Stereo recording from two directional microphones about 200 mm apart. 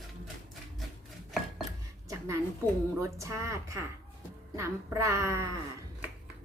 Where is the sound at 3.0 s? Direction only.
15° right (ahead or behind).